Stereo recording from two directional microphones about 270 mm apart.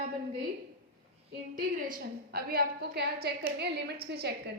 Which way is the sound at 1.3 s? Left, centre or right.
Right.